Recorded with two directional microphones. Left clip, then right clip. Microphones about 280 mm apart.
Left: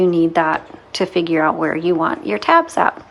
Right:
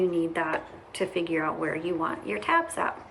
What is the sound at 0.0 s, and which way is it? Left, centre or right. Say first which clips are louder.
A woman's voice: left 12 dB; centre.